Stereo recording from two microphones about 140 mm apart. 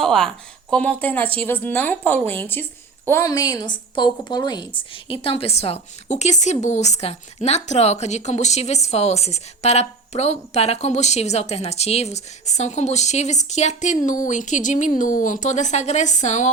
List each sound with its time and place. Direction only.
0.0 s a woman's voice: 5° left (ahead or behind); by 16.5 s 55° left (ahead or behind)